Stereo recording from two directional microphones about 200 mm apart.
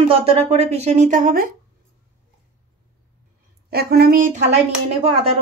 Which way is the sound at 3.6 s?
50° right (ahead or behind).